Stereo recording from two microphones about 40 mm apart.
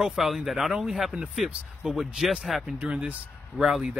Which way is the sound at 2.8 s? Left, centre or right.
Right.